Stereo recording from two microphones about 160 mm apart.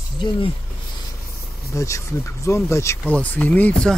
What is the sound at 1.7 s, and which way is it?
Speech, 20° left (ahead or behind).